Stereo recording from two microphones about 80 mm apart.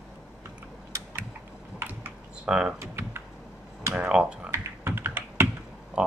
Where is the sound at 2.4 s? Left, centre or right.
Centre.